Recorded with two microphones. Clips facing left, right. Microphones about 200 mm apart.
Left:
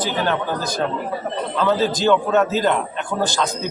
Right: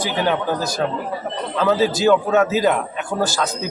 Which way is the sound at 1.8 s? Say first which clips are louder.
Right 2 dB; 5° right (ahead or behind).